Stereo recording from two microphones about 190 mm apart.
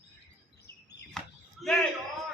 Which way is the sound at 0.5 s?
60° left (ahead or behind).